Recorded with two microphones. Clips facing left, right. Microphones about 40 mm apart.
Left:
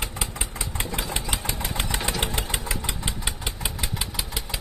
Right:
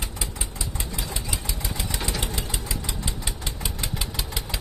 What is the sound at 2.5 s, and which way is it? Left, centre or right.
Engine, left.